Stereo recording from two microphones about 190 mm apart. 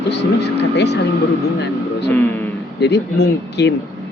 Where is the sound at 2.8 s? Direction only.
60° left (ahead or behind).